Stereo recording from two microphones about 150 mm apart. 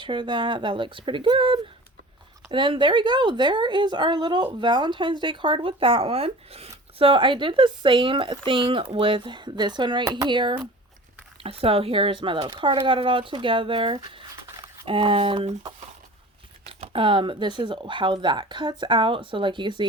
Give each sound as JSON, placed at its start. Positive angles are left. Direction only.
{"t": 0.0, "sound": "speech", "side_deg": -30}
{"t": 16.6, "sound": "speech", "side_deg": -40}